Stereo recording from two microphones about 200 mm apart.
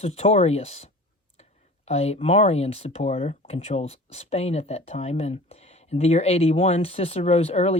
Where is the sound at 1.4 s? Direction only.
30° left (ahead or behind).